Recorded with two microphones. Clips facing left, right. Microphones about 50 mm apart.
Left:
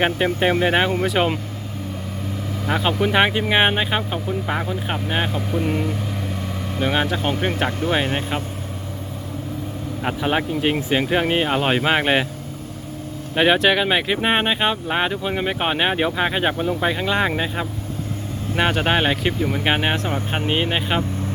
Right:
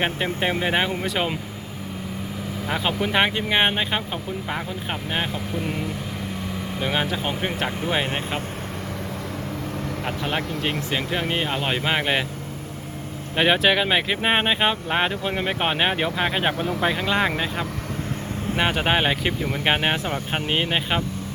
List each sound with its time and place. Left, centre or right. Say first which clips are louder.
0.3 s speech: left 4 dB; centre
2.6 s speech: left 4 dB; centre
10.0 s speech: left 6 dB; centre
13.3 s speech: left 2 dB; centre